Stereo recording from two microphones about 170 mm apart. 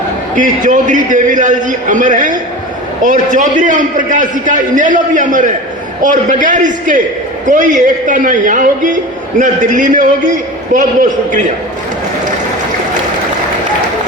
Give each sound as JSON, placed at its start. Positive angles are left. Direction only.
{"t": 0.3, "sound": "a man's voice", "side_deg": -50}